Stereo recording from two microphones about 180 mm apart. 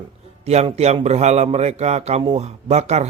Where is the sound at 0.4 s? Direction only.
35° right (ahead or behind).